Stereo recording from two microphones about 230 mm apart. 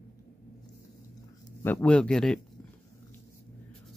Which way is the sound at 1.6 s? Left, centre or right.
Centre.